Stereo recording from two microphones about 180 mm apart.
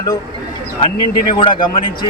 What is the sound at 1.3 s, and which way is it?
Speech, 30° left (ahead or behind).